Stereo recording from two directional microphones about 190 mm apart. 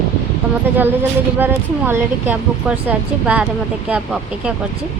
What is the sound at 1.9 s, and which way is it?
Speech, 10° right (ahead or behind).